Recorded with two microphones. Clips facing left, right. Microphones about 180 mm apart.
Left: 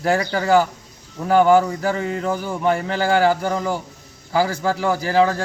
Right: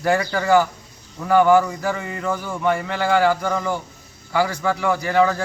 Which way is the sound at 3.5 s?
5° left (ahead or behind).